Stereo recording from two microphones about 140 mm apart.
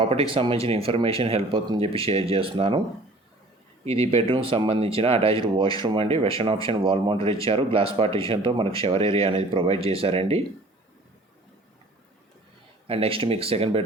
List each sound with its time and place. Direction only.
0.0 s speech: 40° right (ahead or behind)
3.8 s speech: 45° right (ahead or behind)
12.9 s speech: 40° right (ahead or behind)